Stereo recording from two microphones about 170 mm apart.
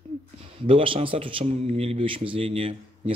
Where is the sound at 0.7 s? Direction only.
35° right (ahead or behind).